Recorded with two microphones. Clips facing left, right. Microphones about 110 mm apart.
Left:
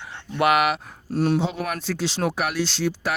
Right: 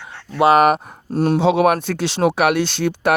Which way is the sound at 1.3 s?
80° right.